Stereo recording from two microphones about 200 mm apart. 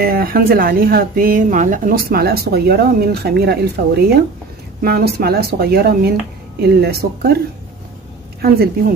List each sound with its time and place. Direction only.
0.0 s speech: 45° right (ahead or behind)